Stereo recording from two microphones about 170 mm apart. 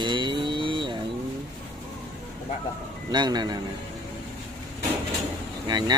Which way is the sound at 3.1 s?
25° right (ahead or behind).